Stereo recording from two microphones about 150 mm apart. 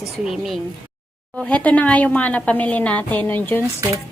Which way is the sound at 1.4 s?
10° left (ahead or behind).